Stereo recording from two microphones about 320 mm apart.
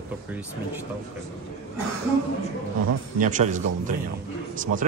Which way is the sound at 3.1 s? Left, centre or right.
Right.